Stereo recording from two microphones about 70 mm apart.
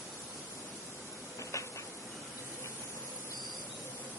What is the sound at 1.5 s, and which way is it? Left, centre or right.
Train, left.